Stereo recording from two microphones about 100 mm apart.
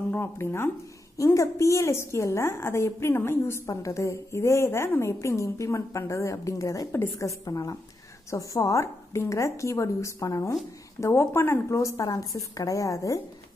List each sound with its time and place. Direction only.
0.1 s a woman's voice: 25° left (ahead or behind)